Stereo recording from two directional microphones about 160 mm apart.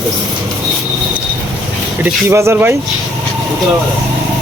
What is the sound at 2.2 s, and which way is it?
Speech, 15° right (ahead or behind).